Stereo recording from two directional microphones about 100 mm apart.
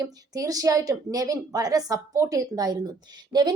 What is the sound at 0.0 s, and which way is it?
A woman's voice, 35° right (ahead or behind).